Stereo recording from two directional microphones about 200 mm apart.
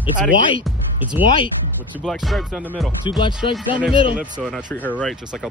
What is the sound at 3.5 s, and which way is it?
Music, 5° right (ahead or behind).